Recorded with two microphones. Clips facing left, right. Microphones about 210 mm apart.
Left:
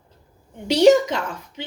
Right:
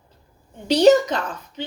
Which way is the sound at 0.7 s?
25° left (ahead or behind).